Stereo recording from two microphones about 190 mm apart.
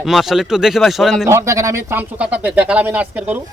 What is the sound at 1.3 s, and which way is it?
Speech, 15° right (ahead or behind).